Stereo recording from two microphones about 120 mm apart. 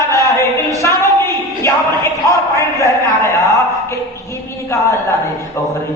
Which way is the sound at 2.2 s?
25° left (ahead or behind).